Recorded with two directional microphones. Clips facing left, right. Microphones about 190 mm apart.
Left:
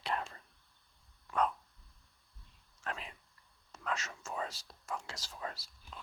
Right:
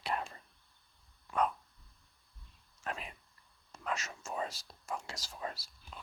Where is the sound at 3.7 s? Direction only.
10° right (ahead or behind).